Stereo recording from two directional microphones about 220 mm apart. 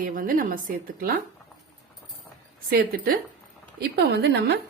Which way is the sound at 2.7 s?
45° right (ahead or behind).